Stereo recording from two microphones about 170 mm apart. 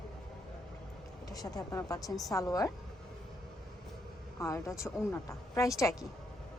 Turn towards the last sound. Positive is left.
turn(degrees=20)  # may be behind; listen again after turning